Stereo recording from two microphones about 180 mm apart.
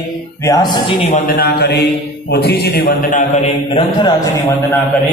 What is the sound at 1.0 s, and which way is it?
Speech, 55° left (ahead or behind).